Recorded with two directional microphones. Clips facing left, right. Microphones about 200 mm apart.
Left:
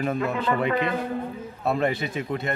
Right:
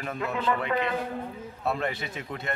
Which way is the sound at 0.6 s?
15° left (ahead or behind).